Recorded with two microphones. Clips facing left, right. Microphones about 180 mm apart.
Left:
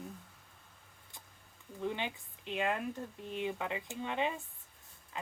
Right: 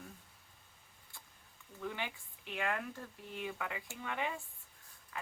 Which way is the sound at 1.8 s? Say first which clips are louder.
Left 4 dB; 20° left (ahead or behind).